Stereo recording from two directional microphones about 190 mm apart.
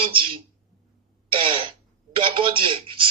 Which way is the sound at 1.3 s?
30° right (ahead or behind).